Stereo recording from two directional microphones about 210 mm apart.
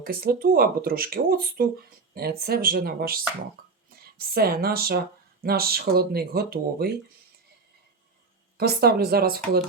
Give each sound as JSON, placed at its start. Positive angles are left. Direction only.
{"t": 0.0, "sound": "speech", "side_deg": -45}
{"t": 4.4, "sound": "speech", "side_deg": -45}
{"t": 8.5, "sound": "speech", "side_deg": -50}